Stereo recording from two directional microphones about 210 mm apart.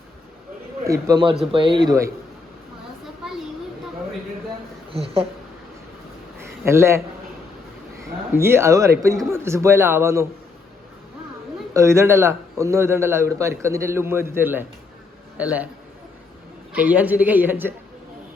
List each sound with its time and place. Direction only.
0.9 s speech: 15° right (ahead or behind)
4.9 s speech: 30° right (ahead or behind)
6.7 s a man's voice: 10° right (ahead or behind)
8.4 s a man's voice: 10° right (ahead or behind)
11.7 s a man's voice: 15° right (ahead or behind)
16.7 s a man's voice: 5° right (ahead or behind)